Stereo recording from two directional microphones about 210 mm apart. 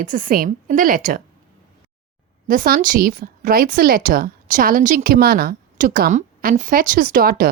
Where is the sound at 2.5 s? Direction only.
40° right (ahead or behind).